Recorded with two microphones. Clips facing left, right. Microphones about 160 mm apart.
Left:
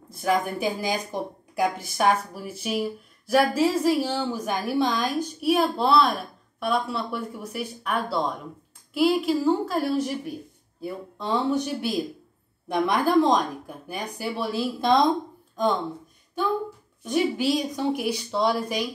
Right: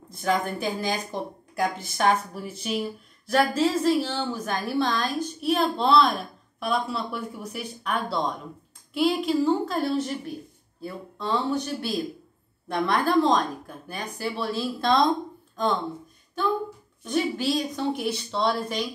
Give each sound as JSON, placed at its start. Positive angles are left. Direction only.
{"t": 0.2, "sound": "speech", "side_deg": 10}
{"t": 17.0, "sound": "speech", "side_deg": 15}